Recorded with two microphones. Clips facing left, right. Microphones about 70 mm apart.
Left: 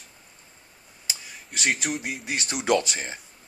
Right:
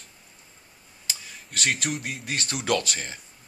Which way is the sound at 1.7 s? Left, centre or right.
Centre.